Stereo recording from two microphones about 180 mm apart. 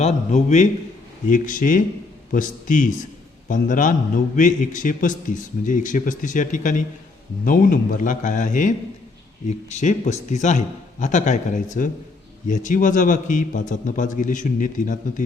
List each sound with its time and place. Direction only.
0.0 s a man's voice: 40° left (ahead or behind)